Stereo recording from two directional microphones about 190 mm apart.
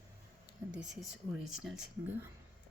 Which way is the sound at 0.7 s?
5° right (ahead or behind).